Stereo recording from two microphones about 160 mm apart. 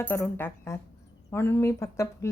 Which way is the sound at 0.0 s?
15° left (ahead or behind).